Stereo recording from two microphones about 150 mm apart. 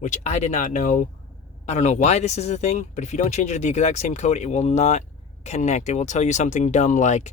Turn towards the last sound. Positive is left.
turn(degrees=50)  # may be behind; listen again after turning